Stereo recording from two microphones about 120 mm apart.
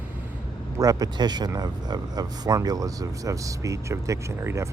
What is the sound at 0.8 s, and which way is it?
Speech, 30° right (ahead or behind).